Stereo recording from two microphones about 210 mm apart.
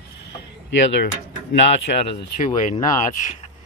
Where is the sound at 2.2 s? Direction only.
40° left (ahead or behind).